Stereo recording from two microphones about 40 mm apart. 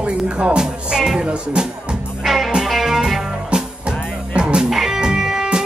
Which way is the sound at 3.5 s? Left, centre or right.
Right.